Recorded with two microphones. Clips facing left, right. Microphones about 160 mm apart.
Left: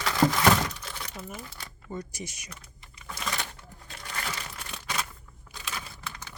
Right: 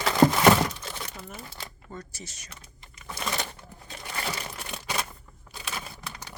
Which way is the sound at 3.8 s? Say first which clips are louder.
Right 3 dB; 20° right (ahead or behind).